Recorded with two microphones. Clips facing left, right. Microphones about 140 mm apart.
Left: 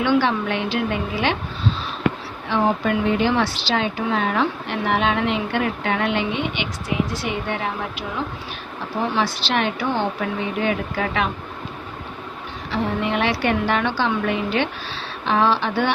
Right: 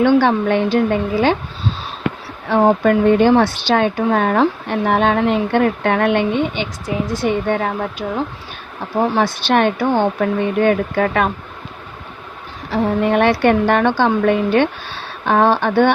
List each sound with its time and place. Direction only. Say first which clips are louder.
0.0 s a woman's voice: right 6 dB; 50° right (ahead or behind)
2.6 s a woman's voice: right 7 dB; 45° right (ahead or behind)
12.7 s a woman's voice: right 7 dB; 45° right (ahead or behind)